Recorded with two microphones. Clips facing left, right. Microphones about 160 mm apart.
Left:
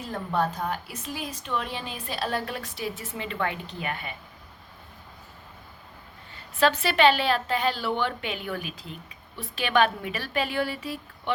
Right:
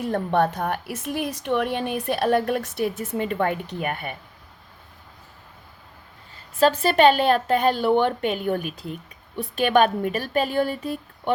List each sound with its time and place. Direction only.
0.0 s a woman's voice: 60° right (ahead or behind)
6.6 s a woman's voice: 45° right (ahead or behind)